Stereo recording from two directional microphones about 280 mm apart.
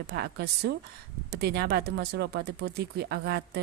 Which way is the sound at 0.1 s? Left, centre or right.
Right.